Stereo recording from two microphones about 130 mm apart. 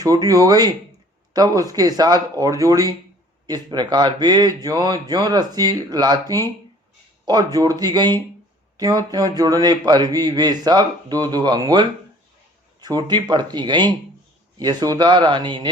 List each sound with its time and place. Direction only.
0.0 s speech: 25° right (ahead or behind)